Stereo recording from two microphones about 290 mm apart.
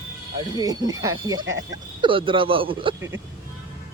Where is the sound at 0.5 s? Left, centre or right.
Centre.